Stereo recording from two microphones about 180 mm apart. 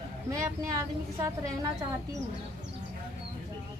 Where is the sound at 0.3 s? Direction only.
15° right (ahead or behind).